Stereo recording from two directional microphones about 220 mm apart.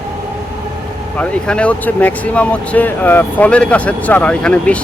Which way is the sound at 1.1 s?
5° left (ahead or behind).